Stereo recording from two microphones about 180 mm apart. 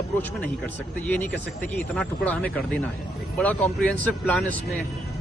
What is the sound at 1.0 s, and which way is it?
Speech, 10° left (ahead or behind).